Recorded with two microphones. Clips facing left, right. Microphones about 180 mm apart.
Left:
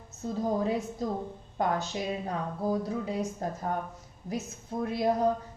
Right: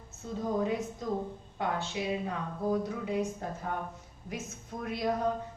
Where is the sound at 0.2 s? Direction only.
40° left (ahead or behind).